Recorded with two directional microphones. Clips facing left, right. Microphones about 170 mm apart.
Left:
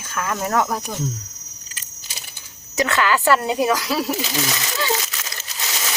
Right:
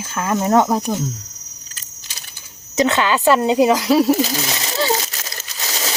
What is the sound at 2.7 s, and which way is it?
Speech, 20° right (ahead or behind).